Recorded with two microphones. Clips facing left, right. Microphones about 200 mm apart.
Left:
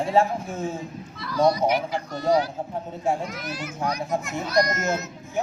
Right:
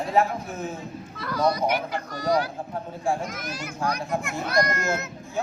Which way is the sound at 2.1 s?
25° left (ahead or behind).